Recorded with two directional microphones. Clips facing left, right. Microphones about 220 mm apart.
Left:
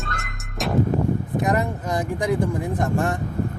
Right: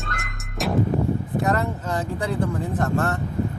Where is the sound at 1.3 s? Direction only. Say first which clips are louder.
Even; 15° left (ahead or behind).